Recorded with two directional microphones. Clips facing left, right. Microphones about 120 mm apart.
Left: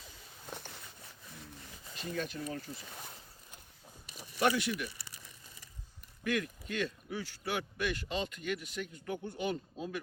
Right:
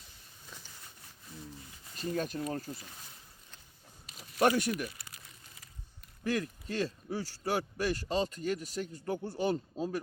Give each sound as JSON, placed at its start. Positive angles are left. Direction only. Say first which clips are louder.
{"t": 0.4, "sound": "a sound", "louder": "left 7 dB", "side_deg": 60}
{"t": 2.0, "sound": "speech", "louder": "right 4 dB", "side_deg": -40}
{"t": 4.4, "sound": "speech", "louder": "right 3 dB", "side_deg": -45}
{"t": 6.2, "sound": "speech", "louder": "right 1 dB", "side_deg": -35}